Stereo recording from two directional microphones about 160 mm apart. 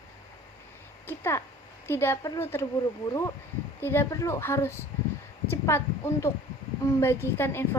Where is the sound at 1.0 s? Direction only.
15° left (ahead or behind).